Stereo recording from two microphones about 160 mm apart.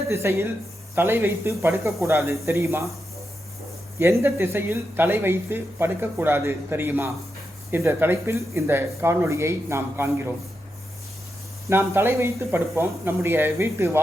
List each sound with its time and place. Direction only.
0.1 s speech: 15° right (ahead or behind)
3.9 s speech: 15° right (ahead or behind)
11.7 s speech: 15° right (ahead or behind)